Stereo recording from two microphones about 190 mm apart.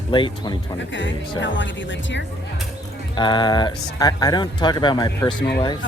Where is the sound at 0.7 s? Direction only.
75° left (ahead or behind).